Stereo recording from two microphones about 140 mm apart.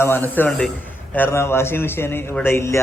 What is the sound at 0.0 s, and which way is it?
A man's voice, 15° left (ahead or behind).